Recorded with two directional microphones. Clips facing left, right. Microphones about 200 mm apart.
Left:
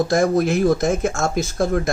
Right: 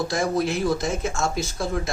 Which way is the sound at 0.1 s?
50° left (ahead or behind).